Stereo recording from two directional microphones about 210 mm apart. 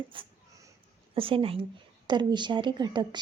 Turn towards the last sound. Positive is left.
turn(degrees=-20)  # may be behind; listen again after turning